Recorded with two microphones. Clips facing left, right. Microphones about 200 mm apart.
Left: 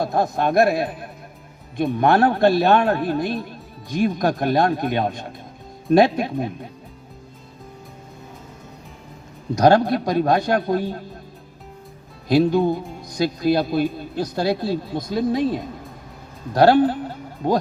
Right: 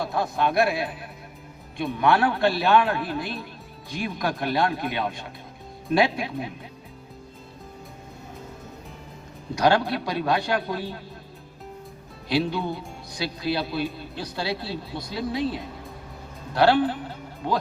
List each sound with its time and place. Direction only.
0.0 s a man's voice: 45° left (ahead or behind)
9.6 s speech: 45° left (ahead or behind)
12.3 s speech: 45° left (ahead or behind)